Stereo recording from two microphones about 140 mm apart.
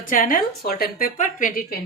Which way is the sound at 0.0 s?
80° left.